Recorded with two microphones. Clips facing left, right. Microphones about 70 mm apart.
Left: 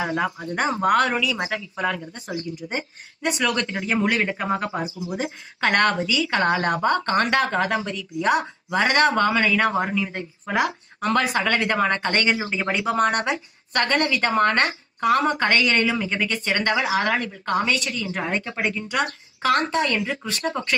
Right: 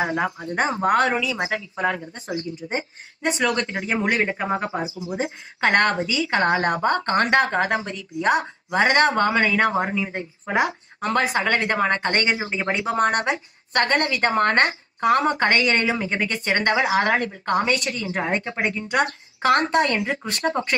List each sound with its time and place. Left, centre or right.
0.0 s a woman's voice: right
2.6 s speech: centre
3.2 s a woman's voice: right